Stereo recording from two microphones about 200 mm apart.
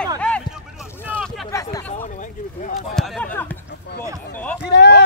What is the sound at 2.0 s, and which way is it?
Speech, 40° left (ahead or behind).